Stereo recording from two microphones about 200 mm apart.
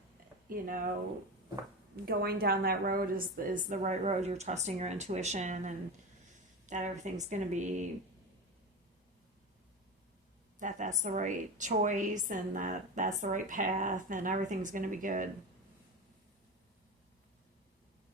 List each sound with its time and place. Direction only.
0.4 s speech: 45° right (ahead or behind)
2.0 s a woman's voice: 50° right (ahead or behind)
10.6 s a woman's voice: 40° right (ahead or behind)